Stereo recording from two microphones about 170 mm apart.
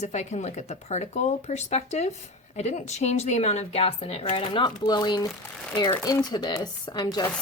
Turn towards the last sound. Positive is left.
turn(degrees=25)  # may be behind; listen again after turning